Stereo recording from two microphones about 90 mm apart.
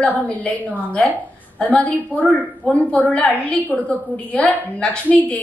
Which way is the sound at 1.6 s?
15° left (ahead or behind).